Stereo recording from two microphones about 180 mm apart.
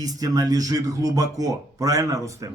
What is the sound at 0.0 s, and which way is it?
A man's voice, 20° right (ahead or behind).